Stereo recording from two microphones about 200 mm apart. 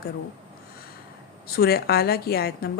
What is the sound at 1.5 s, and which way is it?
A woman's voice, 50° left (ahead or behind).